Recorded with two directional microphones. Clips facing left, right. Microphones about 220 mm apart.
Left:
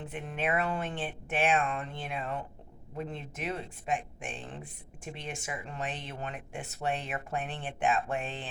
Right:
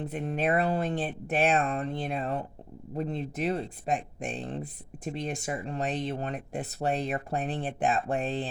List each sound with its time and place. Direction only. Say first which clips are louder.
0.0 s speech: right 5 dB; 40° right (ahead or behind)